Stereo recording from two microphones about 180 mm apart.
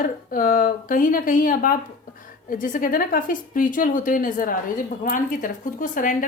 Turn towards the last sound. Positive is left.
turn(degrees=45)  # may be behind; listen again after turning